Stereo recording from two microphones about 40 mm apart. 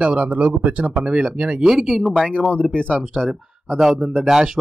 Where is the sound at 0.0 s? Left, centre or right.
Right.